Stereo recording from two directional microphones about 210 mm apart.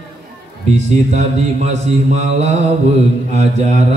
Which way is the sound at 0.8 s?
30° right (ahead or behind).